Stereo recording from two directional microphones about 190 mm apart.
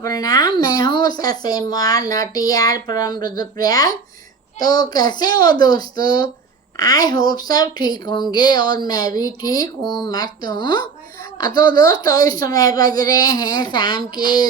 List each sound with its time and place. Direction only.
0.0 s speech: 20° left (ahead or behind)